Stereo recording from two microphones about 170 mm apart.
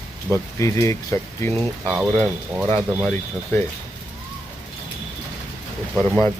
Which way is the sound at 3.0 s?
10° left (ahead or behind).